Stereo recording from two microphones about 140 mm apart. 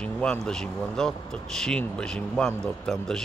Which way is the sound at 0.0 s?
5° left (ahead or behind).